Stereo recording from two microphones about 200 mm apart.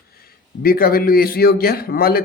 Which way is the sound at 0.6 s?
50° left (ahead or behind).